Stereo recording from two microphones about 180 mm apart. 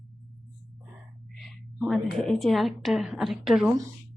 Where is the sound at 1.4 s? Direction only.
Centre (ahead or behind).